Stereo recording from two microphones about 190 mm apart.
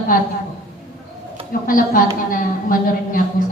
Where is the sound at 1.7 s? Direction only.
45° left (ahead or behind).